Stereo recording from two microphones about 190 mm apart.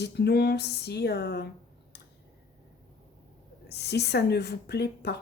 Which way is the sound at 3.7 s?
60° left (ahead or behind).